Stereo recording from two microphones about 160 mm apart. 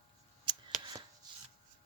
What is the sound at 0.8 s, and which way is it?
Shuffling cards, 25° right (ahead or behind).